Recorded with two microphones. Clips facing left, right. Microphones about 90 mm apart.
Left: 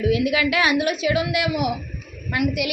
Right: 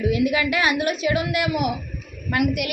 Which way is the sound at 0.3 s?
40° right (ahead or behind).